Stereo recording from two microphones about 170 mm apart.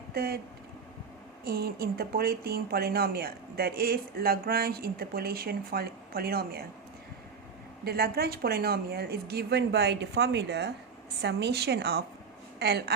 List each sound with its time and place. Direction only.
0.1 s speech: 65° right (ahead or behind)
1.5 s speech: 65° right (ahead or behind)
7.9 s speech: 65° right (ahead or behind)